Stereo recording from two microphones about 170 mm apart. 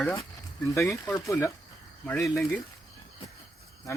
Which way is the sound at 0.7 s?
15° left (ahead or behind).